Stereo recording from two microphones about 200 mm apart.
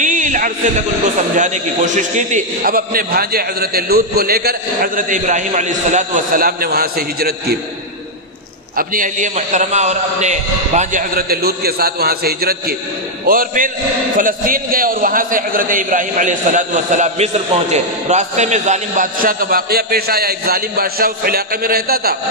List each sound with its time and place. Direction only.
0.0 s a sound: 40° right (ahead or behind)
1.4 s a man's voice: 40° right (ahead or behind)
8.7 s a man's voice: 40° right (ahead or behind)